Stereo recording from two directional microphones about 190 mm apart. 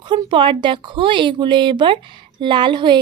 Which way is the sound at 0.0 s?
25° right (ahead or behind).